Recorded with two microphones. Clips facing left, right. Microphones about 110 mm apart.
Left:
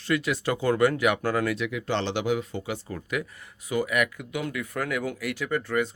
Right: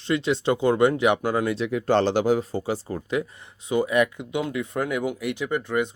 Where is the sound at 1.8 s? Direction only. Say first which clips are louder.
Right 9 dB; 45° right (ahead or behind).